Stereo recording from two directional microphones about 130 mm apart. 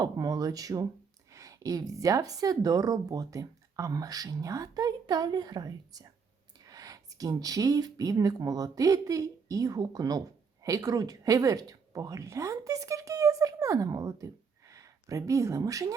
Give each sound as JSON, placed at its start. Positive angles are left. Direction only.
{"t": 0.0, "sound": "speech", "side_deg": -30}